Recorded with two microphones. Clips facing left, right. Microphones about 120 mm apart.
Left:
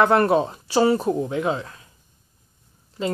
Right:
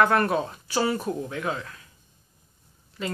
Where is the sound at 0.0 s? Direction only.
25° left (ahead or behind).